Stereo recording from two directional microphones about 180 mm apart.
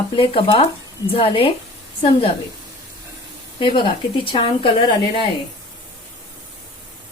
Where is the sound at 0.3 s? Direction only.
30° left (ahead or behind).